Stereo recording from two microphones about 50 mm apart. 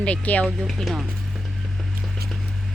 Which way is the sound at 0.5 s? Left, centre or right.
Centre.